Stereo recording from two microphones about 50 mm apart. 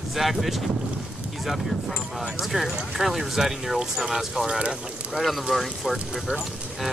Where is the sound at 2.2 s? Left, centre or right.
Centre.